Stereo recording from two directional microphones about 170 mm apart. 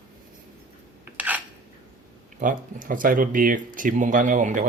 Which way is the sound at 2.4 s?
55° right (ahead or behind).